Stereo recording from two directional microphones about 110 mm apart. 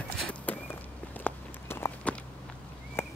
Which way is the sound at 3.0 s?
20° left (ahead or behind).